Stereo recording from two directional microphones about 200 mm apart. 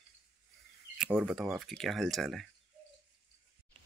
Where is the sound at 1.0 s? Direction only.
5° right (ahead or behind).